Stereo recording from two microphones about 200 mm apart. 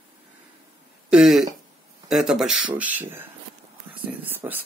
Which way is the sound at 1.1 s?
Centre (ahead or behind).